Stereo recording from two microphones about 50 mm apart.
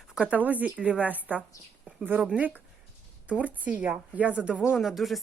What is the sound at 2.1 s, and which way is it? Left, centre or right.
A woman's voice, right.